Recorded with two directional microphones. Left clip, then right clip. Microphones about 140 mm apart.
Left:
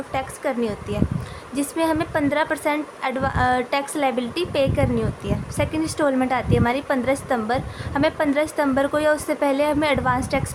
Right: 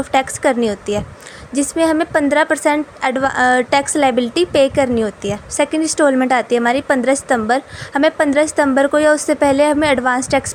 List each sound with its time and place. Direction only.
0.1 s a woman's voice: 50° right (ahead or behind)